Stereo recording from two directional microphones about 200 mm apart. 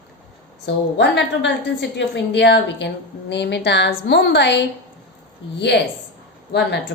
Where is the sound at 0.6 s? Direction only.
60° left (ahead or behind).